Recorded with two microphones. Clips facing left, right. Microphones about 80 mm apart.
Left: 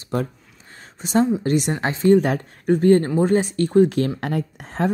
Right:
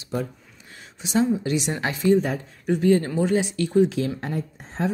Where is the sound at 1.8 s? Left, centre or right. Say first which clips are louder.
Left 3 dB; left.